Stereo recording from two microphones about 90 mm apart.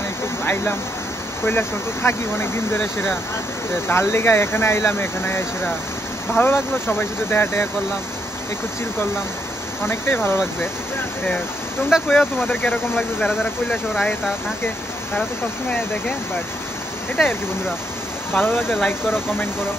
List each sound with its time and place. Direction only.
1.4 s speech: 25° left (ahead or behind)
9.8 s speech: 25° left (ahead or behind)
11.9 s speech: centre (ahead or behind)
12.4 s speech: 20° left (ahead or behind)
13.2 s speech: 5° left (ahead or behind)
18.3 s speech: 25° left (ahead or behind)